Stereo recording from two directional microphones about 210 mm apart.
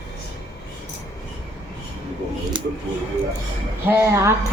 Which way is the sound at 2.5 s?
20° right (ahead or behind).